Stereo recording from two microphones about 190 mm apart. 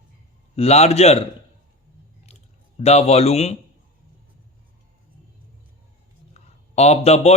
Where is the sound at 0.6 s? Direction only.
35° left (ahead or behind).